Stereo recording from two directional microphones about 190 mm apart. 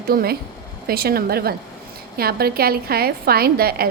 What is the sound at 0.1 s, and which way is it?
A woman's voice, 55° right (ahead or behind).